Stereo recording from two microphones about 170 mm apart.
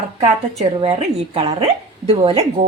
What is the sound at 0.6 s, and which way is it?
Speech, 35° right (ahead or behind).